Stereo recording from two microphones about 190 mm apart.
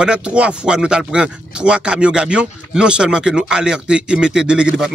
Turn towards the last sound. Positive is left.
turn(degrees=-5)  # may be behind; listen again after turning